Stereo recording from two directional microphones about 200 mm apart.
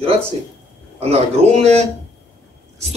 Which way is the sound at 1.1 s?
35° right (ahead or behind).